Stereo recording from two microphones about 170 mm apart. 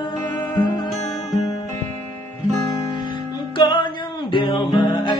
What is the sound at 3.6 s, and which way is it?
Music, 25° left (ahead or behind).